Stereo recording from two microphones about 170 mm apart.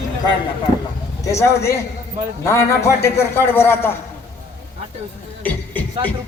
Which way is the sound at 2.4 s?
15° left (ahead or behind).